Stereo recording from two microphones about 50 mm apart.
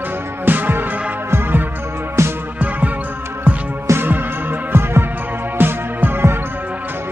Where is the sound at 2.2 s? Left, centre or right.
Right.